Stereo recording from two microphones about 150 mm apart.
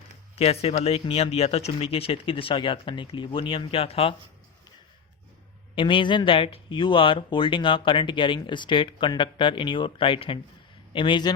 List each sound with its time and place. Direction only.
0.3 s speech: 45° left (ahead or behind)
5.7 s speech: 35° left (ahead or behind)